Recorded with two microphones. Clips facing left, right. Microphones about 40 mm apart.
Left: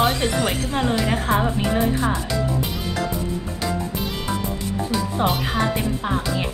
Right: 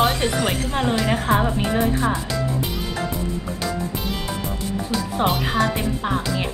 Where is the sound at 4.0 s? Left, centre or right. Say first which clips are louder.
Even; centre.